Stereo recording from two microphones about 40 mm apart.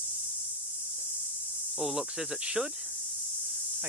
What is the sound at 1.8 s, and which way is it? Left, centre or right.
Speech, centre.